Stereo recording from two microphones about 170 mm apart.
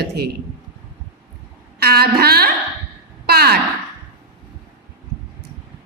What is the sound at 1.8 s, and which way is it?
Speech, 65° right (ahead or behind).